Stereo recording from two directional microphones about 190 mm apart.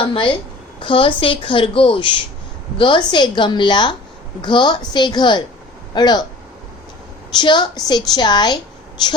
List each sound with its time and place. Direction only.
0.0 s a woman's voice: 25° left (ahead or behind)
7.3 s a woman's voice: 25° left (ahead or behind)